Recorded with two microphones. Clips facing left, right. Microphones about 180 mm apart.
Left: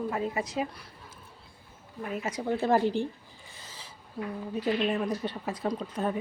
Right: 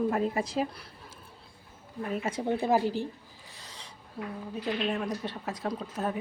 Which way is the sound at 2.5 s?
10° right (ahead or behind).